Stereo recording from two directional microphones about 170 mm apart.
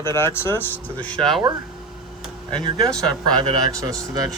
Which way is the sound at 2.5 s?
5° left (ahead or behind).